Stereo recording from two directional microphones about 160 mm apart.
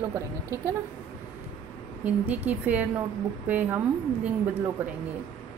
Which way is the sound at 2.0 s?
10° right (ahead or behind).